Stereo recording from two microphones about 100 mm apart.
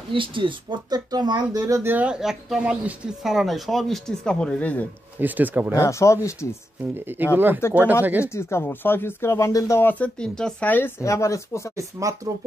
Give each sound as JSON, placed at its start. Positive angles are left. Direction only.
{"t": 0.1, "sound": "speech", "side_deg": -60}
{"t": 0.8, "sound": "speech", "side_deg": -40}
{"t": 1.9, "sound": "speech", "side_deg": -15}
{"t": 5.2, "sound": "speech", "side_deg": -20}
{"t": 5.8, "sound": "speech", "side_deg": 30}
{"t": 7.3, "sound": "speech", "side_deg": -20}
{"t": 8.3, "sound": "speech", "side_deg": 25}
{"t": 9.8, "sound": "speech", "side_deg": 15}
{"t": 11.0, "sound": "speech", "side_deg": 30}
{"t": 11.7, "sound": "speech", "side_deg": -35}